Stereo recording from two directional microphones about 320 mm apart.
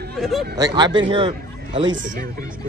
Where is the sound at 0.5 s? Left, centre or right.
Centre.